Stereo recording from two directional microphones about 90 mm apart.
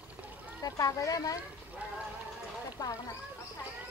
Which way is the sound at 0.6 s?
40° left (ahead or behind).